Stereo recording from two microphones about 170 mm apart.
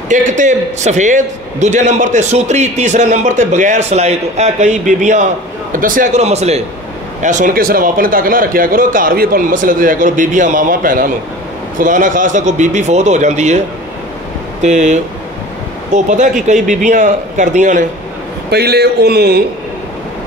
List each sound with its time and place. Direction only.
0.1 s a man's voice: 45° right (ahead or behind)
6.2 s a man's voice: 40° right (ahead or behind)
14.6 s a man's voice: 45° right (ahead or behind)
18.5 s speech: 70° right (ahead or behind)